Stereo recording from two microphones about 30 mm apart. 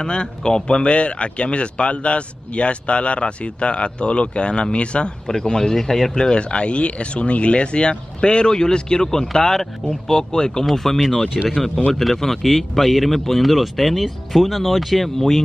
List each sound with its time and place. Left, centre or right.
0.0 s speech: left
0.8 s speech: left
5.3 s speech: left
5.8 s speech: centre
6.1 s speech: left
10.6 s speech: centre